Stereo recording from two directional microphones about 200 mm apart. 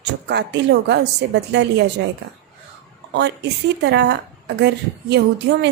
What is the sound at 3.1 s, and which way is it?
A woman's voice, 55° right (ahead or behind).